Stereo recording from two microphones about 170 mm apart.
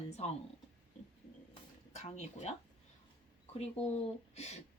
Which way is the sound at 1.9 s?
40° left (ahead or behind).